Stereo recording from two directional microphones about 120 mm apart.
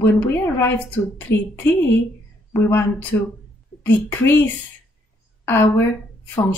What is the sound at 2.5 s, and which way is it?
Speech, 20° left (ahead or behind).